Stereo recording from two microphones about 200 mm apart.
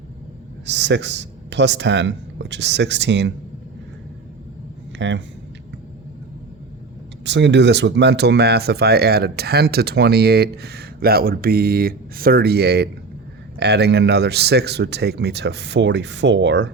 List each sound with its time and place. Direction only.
0.6 s speech: 60° right (ahead or behind)
4.9 s speech: 65° right (ahead or behind)
7.3 s speech: 60° right (ahead or behind)